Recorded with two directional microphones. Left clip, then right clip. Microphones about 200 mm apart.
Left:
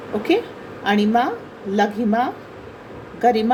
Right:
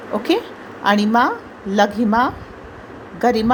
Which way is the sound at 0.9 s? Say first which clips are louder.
Right 3 dB; 35° right (ahead or behind).